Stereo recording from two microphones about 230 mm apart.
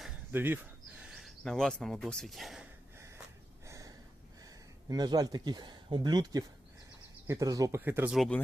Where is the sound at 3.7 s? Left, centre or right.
Centre.